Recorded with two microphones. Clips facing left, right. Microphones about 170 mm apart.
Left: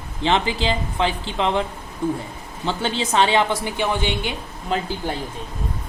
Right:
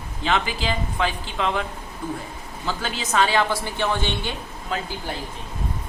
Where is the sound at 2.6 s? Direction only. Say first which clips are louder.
Left 5 dB; 25° left (ahead or behind).